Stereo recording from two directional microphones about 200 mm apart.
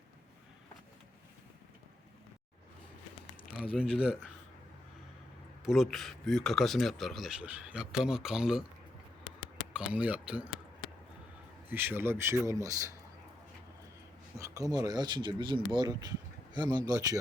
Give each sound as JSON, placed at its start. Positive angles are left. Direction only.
{"t": 3.8, "sound": "a man's voice", "side_deg": -5}
{"t": 5.6, "sound": "a man's voice", "side_deg": 0}
{"t": 9.2, "sound": "a sound", "side_deg": 0}
{"t": 11.7, "sound": "speech", "side_deg": -10}
{"t": 14.3, "sound": "speech", "side_deg": -15}